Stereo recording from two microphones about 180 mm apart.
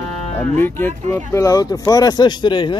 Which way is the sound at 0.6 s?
10° left (ahead or behind).